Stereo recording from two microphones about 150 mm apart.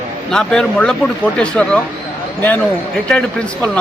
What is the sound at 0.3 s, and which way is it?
Speech, 5° left (ahead or behind).